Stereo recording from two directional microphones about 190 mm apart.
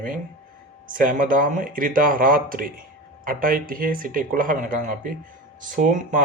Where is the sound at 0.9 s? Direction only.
45° right (ahead or behind).